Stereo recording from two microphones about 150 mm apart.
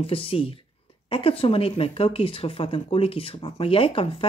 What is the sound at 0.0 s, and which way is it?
Speech, 40° left (ahead or behind).